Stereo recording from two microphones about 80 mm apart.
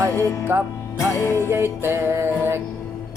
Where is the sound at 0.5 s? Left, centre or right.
Right.